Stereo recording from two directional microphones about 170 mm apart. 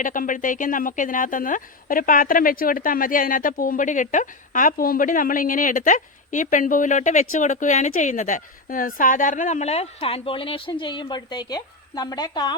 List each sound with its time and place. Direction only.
0.0 s speech: 50° left (ahead or behind); by 12.5 s 25° left (ahead or behind)